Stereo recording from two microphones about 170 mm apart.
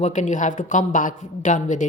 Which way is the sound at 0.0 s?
45° left (ahead or behind).